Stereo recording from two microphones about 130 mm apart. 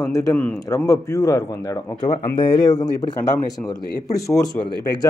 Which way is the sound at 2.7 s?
30° left (ahead or behind).